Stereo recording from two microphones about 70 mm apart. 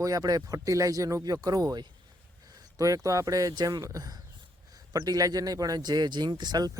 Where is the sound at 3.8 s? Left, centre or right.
Right.